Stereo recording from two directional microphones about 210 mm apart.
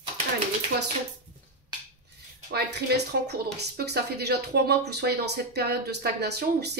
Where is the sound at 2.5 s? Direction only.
50° right (ahead or behind).